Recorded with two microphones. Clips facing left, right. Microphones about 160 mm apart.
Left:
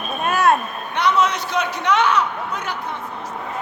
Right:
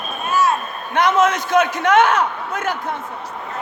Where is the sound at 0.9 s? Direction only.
50° right (ahead or behind).